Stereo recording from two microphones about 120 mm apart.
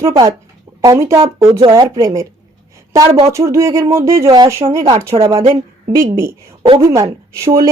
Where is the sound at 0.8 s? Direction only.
25° right (ahead or behind).